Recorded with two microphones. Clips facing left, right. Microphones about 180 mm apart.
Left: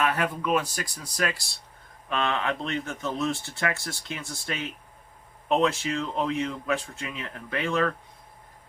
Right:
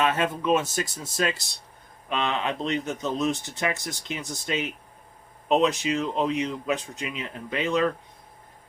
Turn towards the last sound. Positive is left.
turn(degrees=-20)  # may be behind; listen again after turning